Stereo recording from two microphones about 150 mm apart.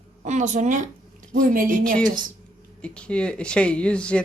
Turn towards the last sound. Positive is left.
turn(degrees=5)  # may be behind; listen again after turning